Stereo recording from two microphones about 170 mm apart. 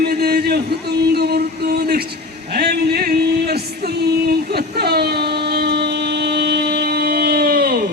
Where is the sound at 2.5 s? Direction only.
70° right (ahead or behind).